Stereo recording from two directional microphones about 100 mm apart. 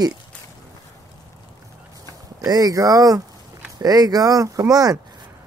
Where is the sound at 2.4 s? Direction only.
40° right (ahead or behind).